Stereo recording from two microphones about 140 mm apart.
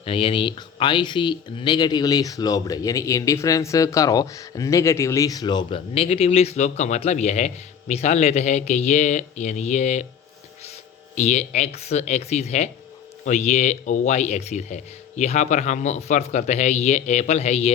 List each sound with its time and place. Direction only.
0.0 s speech: 40° left (ahead or behind); by 10.1 s 55° left (ahead or behind)
11.1 s speech: 55° left (ahead or behind)